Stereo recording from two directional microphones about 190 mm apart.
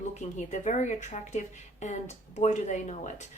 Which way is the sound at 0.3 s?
40° left (ahead or behind).